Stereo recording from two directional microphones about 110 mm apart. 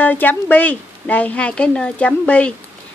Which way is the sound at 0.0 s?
15° left (ahead or behind).